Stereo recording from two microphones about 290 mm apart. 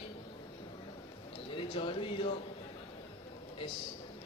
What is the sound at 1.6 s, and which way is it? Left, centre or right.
Speech, centre.